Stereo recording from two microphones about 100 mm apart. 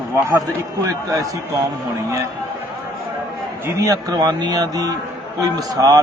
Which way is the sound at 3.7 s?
40° right (ahead or behind).